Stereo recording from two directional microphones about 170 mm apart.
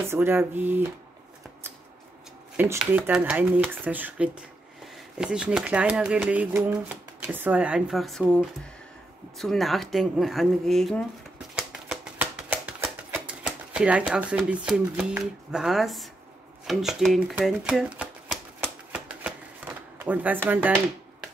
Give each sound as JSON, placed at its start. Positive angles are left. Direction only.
{"t": 0.0, "sound": "speech", "side_deg": -15}
{"t": 2.5, "sound": "speech", "side_deg": -10}
{"t": 11.5, "sound": "a sound", "side_deg": -5}
{"t": 16.6, "sound": "shuffling cards", "side_deg": 0}